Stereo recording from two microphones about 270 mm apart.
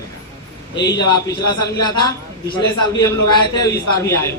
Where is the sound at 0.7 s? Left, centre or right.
Centre.